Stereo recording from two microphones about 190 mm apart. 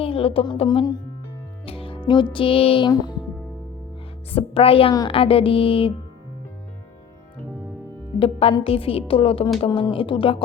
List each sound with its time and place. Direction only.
0.0 s speech: 30° left (ahead or behind)
1.6 s music: 30° left (ahead or behind)
2.3 s speech: 30° left (ahead or behind)
4.3 s speech: 30° left (ahead or behind)
8.2 s speech: 30° left (ahead or behind)